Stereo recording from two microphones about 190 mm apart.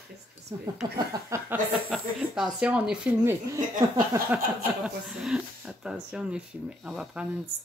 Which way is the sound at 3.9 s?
15° right (ahead or behind).